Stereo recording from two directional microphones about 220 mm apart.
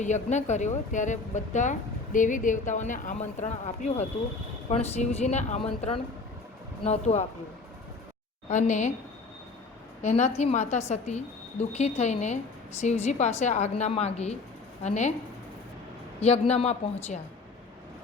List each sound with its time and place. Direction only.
0.0 s speech: 30° left (ahead or behind)
8.4 s speech: 35° left (ahead or behind)
10.0 s speech: 35° left (ahead or behind)
16.2 s speech: 30° left (ahead or behind)